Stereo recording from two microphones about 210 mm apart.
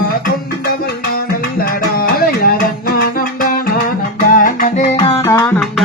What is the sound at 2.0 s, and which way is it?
Music, 45° left (ahead or behind).